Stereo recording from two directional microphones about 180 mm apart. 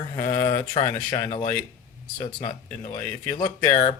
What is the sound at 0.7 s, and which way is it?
Speech, 30° left (ahead or behind).